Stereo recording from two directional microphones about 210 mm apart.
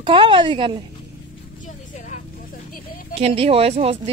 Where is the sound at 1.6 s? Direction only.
35° left (ahead or behind).